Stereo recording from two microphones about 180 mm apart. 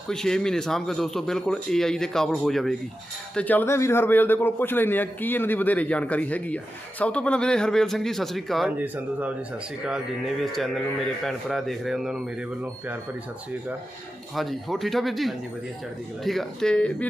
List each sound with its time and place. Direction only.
0.1 s a man's voice: 5° left (ahead or behind)
10.4 s speech: centre (ahead or behind)
14.3 s speech: centre (ahead or behind)